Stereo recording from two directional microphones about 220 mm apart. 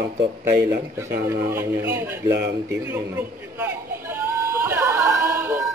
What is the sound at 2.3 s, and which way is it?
Speech, 50° right (ahead or behind).